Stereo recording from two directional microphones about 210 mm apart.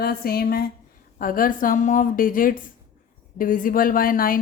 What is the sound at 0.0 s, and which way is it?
A woman's voice, 45° left (ahead or behind).